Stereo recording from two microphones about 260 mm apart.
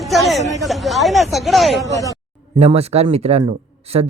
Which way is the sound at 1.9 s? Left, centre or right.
Centre.